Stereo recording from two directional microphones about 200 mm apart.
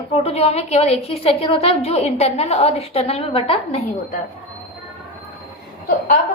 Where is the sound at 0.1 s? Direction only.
30° left (ahead or behind).